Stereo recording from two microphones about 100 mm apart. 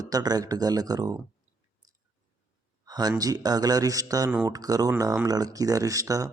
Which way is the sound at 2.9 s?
45° right (ahead or behind).